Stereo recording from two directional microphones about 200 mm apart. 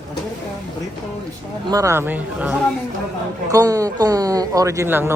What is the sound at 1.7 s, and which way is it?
Speech, 15° right (ahead or behind).